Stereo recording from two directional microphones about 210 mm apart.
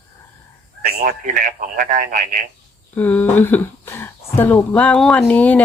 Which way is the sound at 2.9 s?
10° left (ahead or behind).